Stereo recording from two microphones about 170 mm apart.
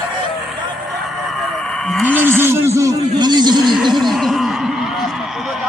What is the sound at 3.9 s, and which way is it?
Speech, centre (ahead or behind).